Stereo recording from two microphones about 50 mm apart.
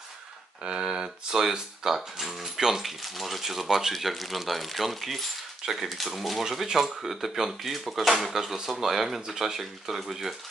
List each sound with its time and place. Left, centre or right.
0.7 s speech: centre